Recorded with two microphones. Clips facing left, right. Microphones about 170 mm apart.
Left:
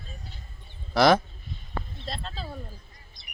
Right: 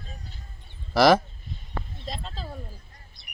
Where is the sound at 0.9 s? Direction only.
Centre (ahead or behind).